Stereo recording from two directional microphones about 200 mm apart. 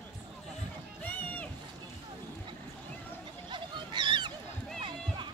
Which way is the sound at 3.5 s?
25° right (ahead or behind).